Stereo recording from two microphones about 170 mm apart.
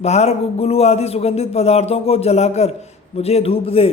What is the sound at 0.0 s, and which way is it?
Speech, 40° left (ahead or behind).